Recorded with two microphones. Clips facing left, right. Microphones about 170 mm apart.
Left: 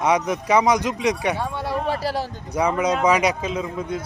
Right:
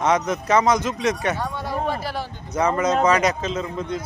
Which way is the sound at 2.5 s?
10° left (ahead or behind).